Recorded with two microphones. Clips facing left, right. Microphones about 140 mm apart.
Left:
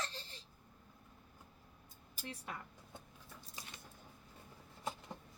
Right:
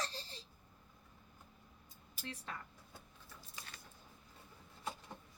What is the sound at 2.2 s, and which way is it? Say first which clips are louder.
Speech: even; 15° left (ahead or behind).